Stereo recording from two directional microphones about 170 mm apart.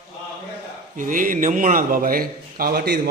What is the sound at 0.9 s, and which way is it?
A man's voice, 50° right (ahead or behind).